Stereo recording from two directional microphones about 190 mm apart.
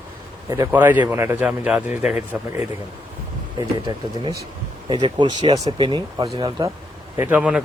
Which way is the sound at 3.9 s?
20° right (ahead or behind).